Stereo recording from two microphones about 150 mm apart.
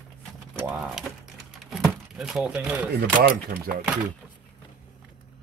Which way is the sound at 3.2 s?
75° right (ahead or behind).